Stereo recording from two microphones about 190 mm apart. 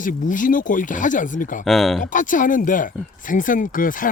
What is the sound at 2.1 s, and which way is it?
Speech, 45° left (ahead or behind).